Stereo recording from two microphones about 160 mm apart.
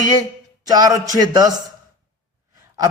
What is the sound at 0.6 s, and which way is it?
Speech, 25° right (ahead or behind).